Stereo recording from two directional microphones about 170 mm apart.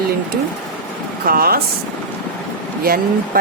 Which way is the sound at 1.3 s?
60° right (ahead or behind).